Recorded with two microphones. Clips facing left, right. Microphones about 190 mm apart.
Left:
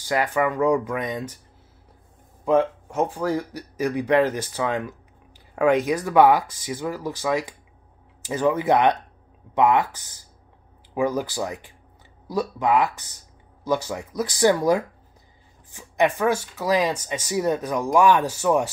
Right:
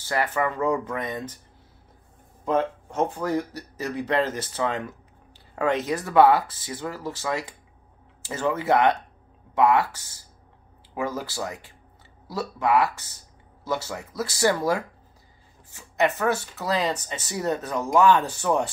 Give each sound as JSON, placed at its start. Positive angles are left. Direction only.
{"t": 0.0, "sound": "speech", "side_deg": 15}
{"t": 2.4, "sound": "speech", "side_deg": 10}